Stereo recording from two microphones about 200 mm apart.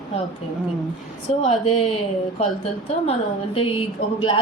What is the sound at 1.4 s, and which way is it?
Speech, 25° left (ahead or behind).